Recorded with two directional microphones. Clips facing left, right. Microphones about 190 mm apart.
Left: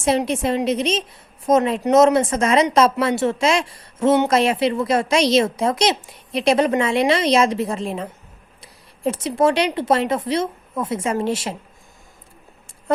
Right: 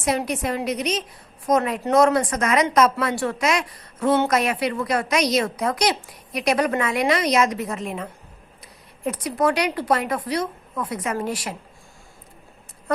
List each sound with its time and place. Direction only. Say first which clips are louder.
0.0 s speech: left 4 dB; 25° left (ahead or behind)